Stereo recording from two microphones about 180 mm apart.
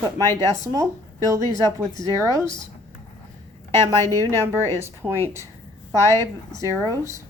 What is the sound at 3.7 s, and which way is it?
Speech, 15° left (ahead or behind).